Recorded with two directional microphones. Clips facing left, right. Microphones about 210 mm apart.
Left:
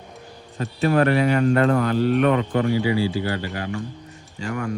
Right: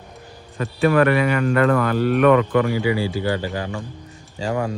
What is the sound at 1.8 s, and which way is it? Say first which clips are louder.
Speech: right 2 dB; 55° right (ahead or behind).